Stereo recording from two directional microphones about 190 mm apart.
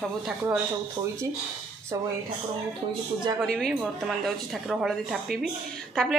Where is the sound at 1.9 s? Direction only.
15° right (ahead or behind).